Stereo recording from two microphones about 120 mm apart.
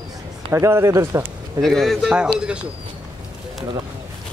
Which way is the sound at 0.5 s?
25° right (ahead or behind).